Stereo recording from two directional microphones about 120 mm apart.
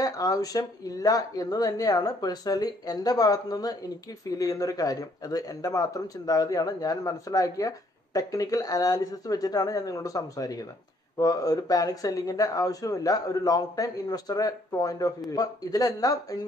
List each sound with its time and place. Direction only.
0.0 s speech: 30° left (ahead or behind)